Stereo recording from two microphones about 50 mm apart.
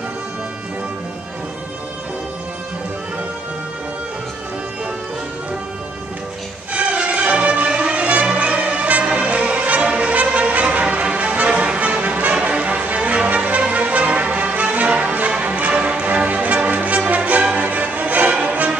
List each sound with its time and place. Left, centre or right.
6.7 s music: right